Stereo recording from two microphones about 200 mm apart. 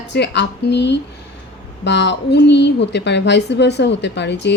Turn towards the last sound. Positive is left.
turn(degrees=60)  # may be behind; listen again after turning